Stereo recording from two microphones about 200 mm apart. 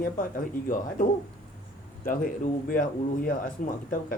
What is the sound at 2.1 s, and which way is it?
A man's voice, 40° left (ahead or behind).